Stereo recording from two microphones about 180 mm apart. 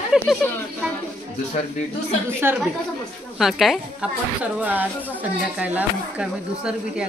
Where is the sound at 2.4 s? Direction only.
10° right (ahead or behind).